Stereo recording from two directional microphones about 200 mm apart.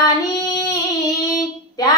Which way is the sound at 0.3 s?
15° left (ahead or behind).